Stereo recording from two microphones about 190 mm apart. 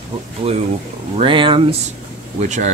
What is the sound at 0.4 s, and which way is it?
Speech, 30° right (ahead or behind).